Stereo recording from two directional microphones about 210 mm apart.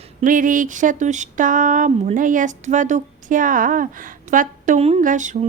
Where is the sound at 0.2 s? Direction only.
40° right (ahead or behind).